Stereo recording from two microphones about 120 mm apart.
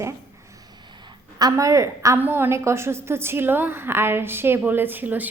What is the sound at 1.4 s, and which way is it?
A woman's voice, 30° right (ahead or behind).